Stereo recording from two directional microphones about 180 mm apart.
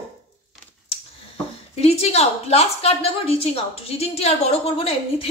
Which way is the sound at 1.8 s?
35° left (ahead or behind).